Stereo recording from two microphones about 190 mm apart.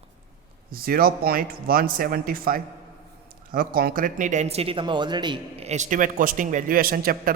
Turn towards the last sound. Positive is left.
turn(degrees=-50)  # may be behind; listen again after turning